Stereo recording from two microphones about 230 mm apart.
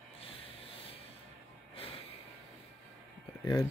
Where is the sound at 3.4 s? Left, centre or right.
Centre.